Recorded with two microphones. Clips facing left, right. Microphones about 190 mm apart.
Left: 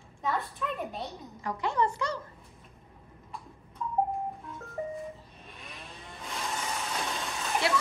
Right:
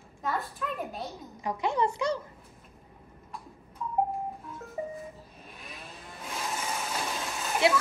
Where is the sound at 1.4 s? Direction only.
15° right (ahead or behind).